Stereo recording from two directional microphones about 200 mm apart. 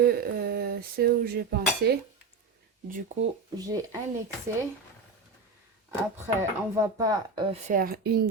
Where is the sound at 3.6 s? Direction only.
20° right (ahead or behind).